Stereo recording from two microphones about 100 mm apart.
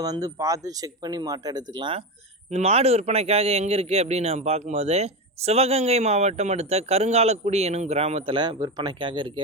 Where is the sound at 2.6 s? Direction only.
90° right.